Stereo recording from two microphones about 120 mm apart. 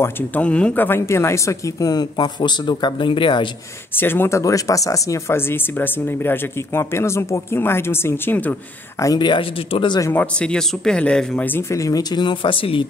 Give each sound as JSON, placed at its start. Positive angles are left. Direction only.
{"t": 0.0, "sound": "speech", "side_deg": 10}
{"t": 3.9, "sound": "speech", "side_deg": 20}
{"t": 9.0, "sound": "speech", "side_deg": 35}
{"t": 10.1, "sound": "speech", "side_deg": 10}